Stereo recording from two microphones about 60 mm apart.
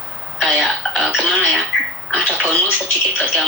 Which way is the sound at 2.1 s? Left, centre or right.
Right.